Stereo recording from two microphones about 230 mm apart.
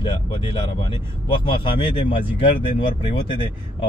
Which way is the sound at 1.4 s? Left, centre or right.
Left.